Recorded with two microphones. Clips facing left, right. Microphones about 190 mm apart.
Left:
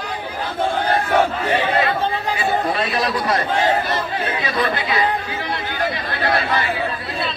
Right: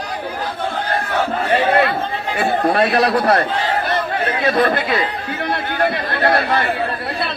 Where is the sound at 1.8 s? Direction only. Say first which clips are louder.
Right 2 dB; 65° right (ahead or behind).